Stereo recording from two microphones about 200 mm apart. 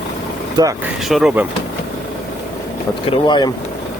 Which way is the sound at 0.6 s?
20° right (ahead or behind).